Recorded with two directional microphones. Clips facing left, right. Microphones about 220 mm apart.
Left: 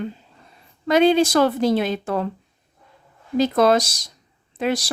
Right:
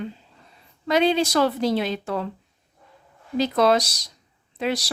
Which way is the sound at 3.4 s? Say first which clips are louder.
Left 3 dB; 50° left (ahead or behind).